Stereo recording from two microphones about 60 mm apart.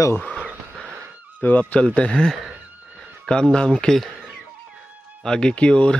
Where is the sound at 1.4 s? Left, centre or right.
Left.